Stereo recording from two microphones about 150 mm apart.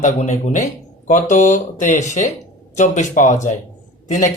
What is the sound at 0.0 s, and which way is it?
Speech, 55° left (ahead or behind).